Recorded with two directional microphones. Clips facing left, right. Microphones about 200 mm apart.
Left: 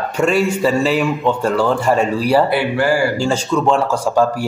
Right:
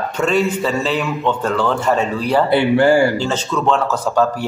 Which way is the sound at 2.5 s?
20° right (ahead or behind).